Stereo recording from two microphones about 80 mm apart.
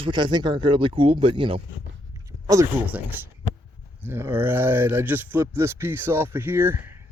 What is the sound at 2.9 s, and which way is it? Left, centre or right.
Speech, right.